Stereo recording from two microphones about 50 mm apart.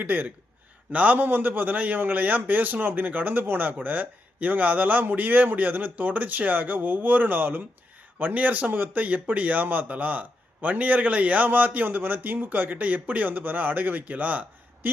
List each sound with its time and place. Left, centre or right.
0.0 s a man's voice: right